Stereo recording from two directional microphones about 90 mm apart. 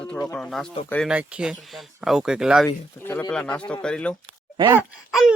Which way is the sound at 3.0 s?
25° left (ahead or behind).